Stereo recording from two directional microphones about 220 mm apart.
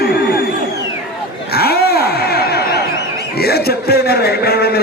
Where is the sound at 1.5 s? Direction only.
45° left (ahead or behind).